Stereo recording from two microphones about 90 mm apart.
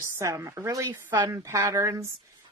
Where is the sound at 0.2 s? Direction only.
35° right (ahead or behind).